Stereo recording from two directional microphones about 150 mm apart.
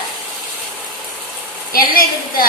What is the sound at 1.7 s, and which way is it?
Speech, 70° left (ahead or behind).